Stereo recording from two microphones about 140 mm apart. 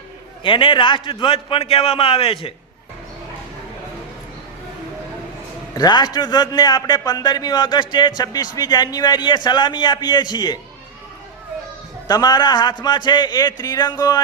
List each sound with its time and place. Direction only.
0.4 s speech: 35° left (ahead or behind)
5.7 s a man's voice: 30° left (ahead or behind)
12.0 s speech: 25° left (ahead or behind)